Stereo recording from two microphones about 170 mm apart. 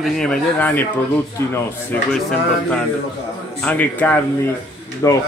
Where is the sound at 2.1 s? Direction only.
5° left (ahead or behind).